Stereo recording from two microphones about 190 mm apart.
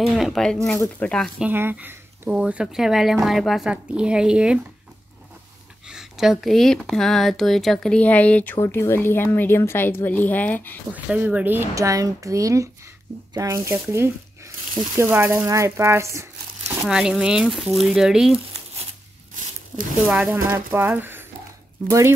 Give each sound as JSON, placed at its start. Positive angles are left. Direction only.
{"t": 0.0, "sound": "speech", "side_deg": 0}
{"t": 1.5, "sound": "speech", "side_deg": -10}
{"t": 5.9, "sound": "a sound", "side_deg": 0}
{"t": 6.4, "sound": "speech", "side_deg": 0}
{"t": 10.9, "sound": "speech", "side_deg": -10}
{"t": 16.8, "sound": "speech", "side_deg": -5}
{"t": 20.1, "sound": "speech", "side_deg": -5}